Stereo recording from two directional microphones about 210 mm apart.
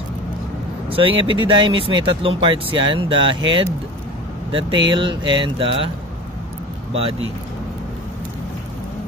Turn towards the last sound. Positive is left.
turn(degrees=-30)  # may be behind; listen again after turning